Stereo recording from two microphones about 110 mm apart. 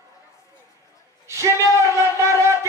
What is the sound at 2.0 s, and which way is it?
Wind instrument, 25° right (ahead or behind).